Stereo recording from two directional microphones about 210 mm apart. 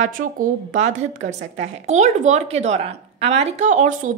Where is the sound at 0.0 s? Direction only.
40° right (ahead or behind).